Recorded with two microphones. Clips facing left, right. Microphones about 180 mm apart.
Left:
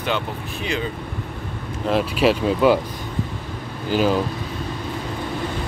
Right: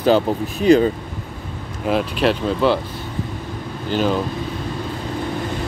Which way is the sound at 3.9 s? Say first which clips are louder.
Left 1 dB; 5° left (ahead or behind).